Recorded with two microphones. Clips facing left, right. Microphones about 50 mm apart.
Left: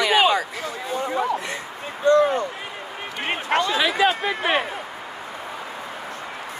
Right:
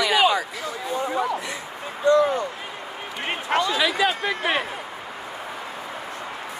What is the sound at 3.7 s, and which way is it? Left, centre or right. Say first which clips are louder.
Speech: left 2 dB; left.